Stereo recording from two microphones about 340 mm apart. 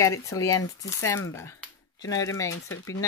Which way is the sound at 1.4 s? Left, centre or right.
Centre.